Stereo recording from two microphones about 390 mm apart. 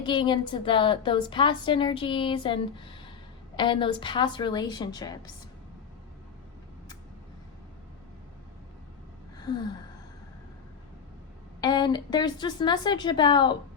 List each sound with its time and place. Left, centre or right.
0.0 s a woman's voice: centre
11.6 s a woman's voice: centre